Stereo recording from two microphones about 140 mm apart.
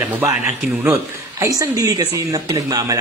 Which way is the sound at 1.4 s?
25° right (ahead or behind).